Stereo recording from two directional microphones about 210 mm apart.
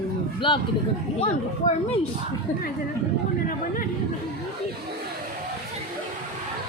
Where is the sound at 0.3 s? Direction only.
25° left (ahead or behind).